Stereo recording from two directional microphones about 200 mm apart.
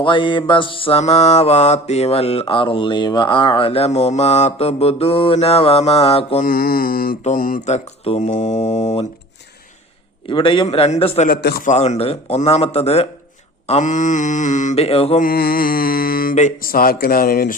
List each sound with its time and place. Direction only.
0.0 s mantra: 25° left (ahead or behind)
6.4 s speech: 45° left (ahead or behind)
10.2 s mantra: 25° left (ahead or behind)
11.3 s a man's voice: 55° left (ahead or behind)
11.7 s speech: 35° left (ahead or behind)
15.2 s music: 50° left (ahead or behind)